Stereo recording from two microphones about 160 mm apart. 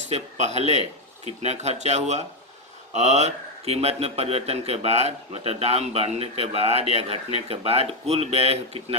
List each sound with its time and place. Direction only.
0.1 s speech: 45° right (ahead or behind)